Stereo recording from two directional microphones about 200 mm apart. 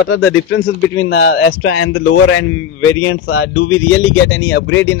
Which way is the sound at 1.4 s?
90° left.